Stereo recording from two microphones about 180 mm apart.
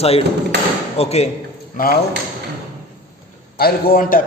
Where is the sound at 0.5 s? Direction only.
65° right (ahead or behind).